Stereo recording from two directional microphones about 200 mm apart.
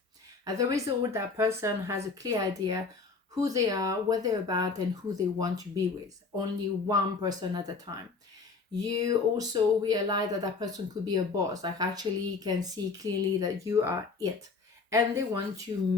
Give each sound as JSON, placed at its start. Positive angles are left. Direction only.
{"t": 0.4, "sound": "speech", "side_deg": -15}